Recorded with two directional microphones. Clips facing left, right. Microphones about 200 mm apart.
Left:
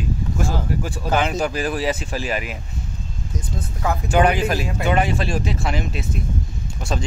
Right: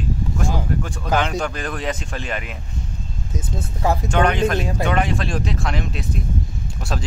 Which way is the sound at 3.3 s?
30° right (ahead or behind).